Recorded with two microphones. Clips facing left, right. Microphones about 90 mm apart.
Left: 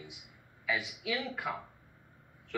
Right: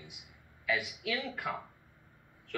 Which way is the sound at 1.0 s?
15° left (ahead or behind).